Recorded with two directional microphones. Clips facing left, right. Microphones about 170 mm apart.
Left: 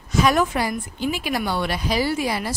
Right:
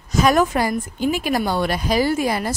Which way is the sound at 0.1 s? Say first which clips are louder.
Right 2 dB; 45° right (ahead or behind).